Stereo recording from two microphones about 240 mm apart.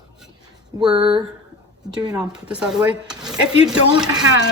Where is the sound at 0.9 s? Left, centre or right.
Right.